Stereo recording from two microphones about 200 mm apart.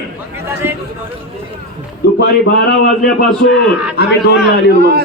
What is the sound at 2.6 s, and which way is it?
Speech, 55° left (ahead or behind).